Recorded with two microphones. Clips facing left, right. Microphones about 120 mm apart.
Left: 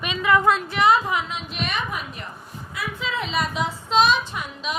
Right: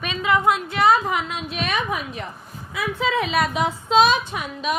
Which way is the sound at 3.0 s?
70° right (ahead or behind).